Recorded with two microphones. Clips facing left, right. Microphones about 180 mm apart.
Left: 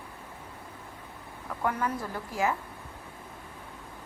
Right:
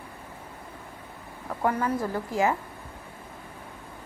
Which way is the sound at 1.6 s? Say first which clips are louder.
Right 4 dB; 45° right (ahead or behind).